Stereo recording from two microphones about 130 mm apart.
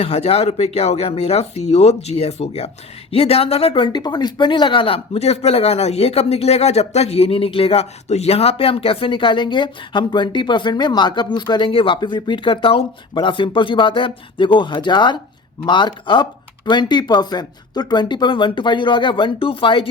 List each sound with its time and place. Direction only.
0.0 s a woman's voice: 50° left (ahead or behind)